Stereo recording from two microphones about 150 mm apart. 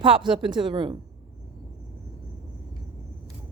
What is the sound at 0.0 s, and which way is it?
Speech, 35° right (ahead or behind).